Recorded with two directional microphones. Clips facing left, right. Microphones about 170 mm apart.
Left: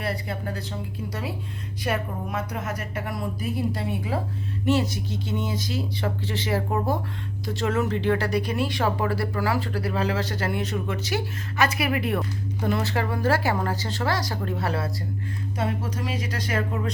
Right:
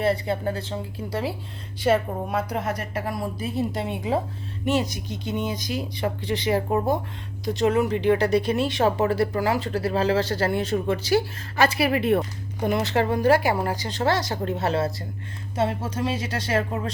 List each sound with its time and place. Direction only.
0.0 s speech: 25° right (ahead or behind)